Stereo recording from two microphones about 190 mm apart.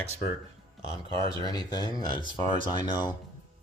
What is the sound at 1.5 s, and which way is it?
Speech, 20° left (ahead or behind).